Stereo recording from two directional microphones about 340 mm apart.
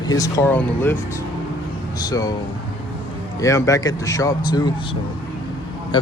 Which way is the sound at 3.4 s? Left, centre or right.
Centre.